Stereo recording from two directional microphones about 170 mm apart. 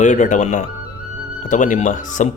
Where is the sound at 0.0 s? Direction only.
45° left (ahead or behind).